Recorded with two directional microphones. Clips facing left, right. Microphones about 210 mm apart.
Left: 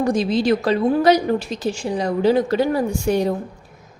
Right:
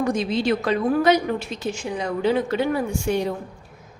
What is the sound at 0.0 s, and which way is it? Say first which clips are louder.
A woman's voice: left 3 dB; 35° left (ahead or behind).